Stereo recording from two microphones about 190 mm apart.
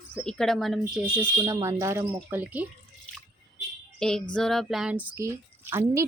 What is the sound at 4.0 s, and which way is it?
A child's voice, 5° left (ahead or behind).